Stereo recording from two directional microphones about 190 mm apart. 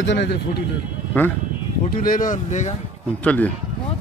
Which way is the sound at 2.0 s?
45° left (ahead or behind).